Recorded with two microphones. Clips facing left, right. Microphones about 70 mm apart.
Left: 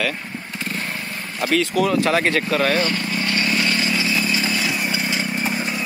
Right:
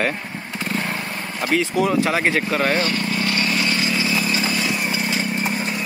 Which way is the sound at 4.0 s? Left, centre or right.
Right.